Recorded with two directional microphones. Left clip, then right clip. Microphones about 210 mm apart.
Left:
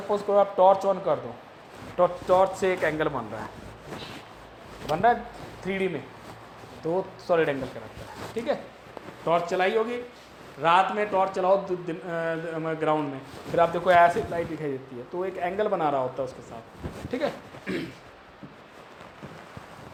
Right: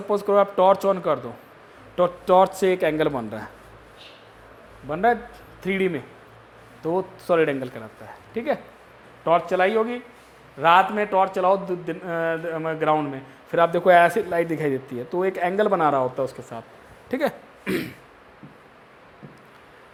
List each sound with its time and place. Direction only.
0.1 s a man's voice: 45° right (ahead or behind)
5.6 s a man's voice: 45° right (ahead or behind)